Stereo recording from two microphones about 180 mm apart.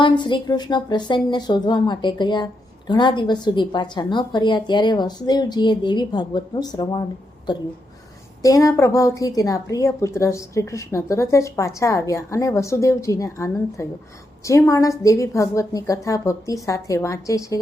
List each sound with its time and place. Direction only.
0.0 s a woman's voice: 25° left (ahead or behind)
8.4 s a woman's voice: 20° left (ahead or behind)